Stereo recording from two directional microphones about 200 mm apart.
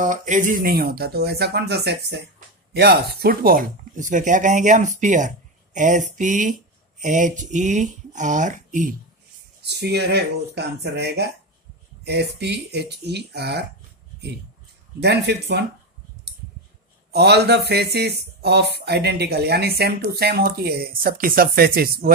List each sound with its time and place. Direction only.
0.0 s speech: 40° right (ahead or behind)
9.6 s speech: 55° right (ahead or behind)
15.0 s speech: 55° right (ahead or behind)
17.1 s speech: 55° right (ahead or behind)